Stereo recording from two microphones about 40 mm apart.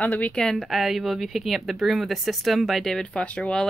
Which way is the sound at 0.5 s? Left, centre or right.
Centre.